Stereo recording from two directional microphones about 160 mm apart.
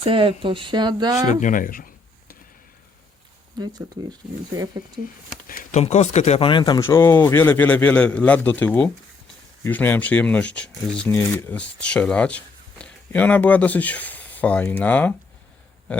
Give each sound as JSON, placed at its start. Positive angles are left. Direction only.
{"t": 0.0, "sound": "speech", "side_deg": -35}
{"t": 1.3, "sound": "speech", "side_deg": 50}
{"t": 3.6, "sound": "speech", "side_deg": -25}
{"t": 5.7, "sound": "speech", "side_deg": 45}
{"t": 6.7, "sound": "a man's voice", "side_deg": 15}